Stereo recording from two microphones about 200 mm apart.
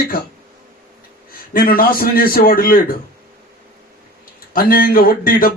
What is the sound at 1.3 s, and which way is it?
Speech, 45° left (ahead or behind).